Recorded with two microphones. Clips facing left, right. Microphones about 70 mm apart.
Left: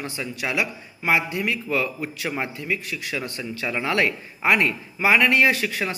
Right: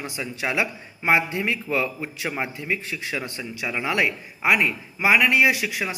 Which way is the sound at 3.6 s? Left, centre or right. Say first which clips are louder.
Left 1 dB; centre.